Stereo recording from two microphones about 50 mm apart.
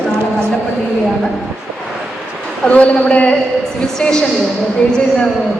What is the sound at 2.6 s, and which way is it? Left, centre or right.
Speech, left.